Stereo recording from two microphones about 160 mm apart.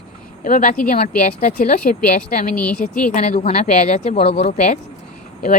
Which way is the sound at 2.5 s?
5° left (ahead or behind).